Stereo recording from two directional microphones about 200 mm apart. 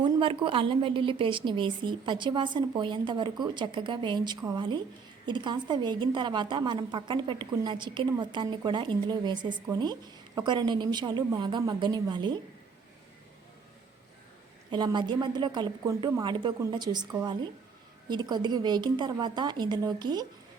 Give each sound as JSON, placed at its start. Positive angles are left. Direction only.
{"t": 0.0, "sound": "a woman's voice", "side_deg": -25}
{"t": 14.7, "sound": "a woman's voice", "side_deg": -20}